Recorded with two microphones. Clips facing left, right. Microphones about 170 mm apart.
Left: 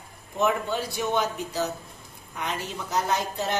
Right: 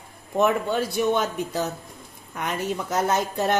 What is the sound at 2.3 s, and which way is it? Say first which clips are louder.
A woman's voice: right 5 dB; 50° right (ahead or behind).